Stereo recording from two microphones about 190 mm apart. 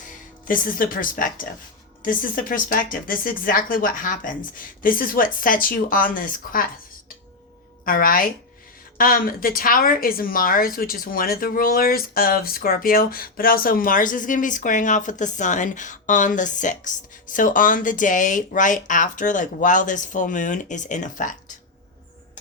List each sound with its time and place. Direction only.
0.4 s a woman's voice: 45° left (ahead or behind)
7.9 s a woman's voice: 50° left (ahead or behind)